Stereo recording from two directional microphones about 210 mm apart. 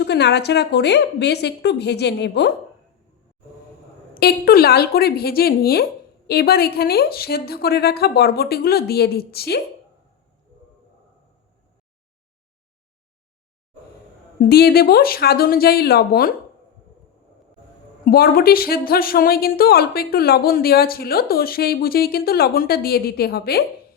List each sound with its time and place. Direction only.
0.0 s a woman's voice: 55° left (ahead or behind)
4.1 s a woman's voice: 45° left (ahead or behind)
14.5 s a woman's voice: 50° left (ahead or behind)
18.0 s a woman's voice: 45° left (ahead or behind)